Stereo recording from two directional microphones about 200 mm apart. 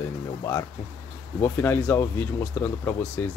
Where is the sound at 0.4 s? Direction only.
15° left (ahead or behind).